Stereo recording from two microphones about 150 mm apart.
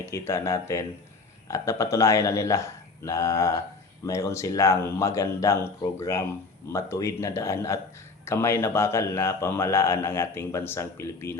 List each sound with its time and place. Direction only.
0.0 s a man's voice: 20° left (ahead or behind)